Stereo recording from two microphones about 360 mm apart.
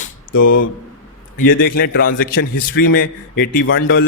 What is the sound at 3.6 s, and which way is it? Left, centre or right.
Speech, left.